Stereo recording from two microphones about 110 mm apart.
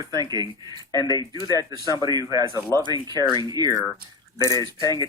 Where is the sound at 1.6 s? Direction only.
35° left (ahead or behind).